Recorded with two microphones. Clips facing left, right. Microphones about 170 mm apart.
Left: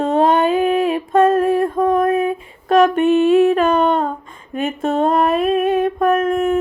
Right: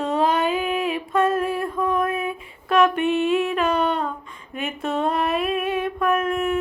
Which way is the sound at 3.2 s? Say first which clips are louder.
Left 8 dB; 45° left (ahead or behind).